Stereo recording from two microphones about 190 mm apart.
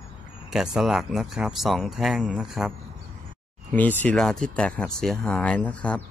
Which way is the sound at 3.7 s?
10° left (ahead or behind).